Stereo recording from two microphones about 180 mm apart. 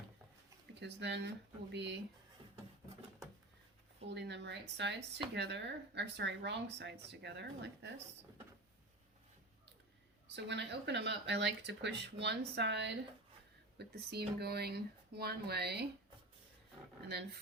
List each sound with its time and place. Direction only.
0.7 s speech: 75° right (ahead or behind)
4.0 s speech: 75° right (ahead or behind)
10.3 s speech: 70° right (ahead or behind)
13.7 s speech: 65° right (ahead or behind)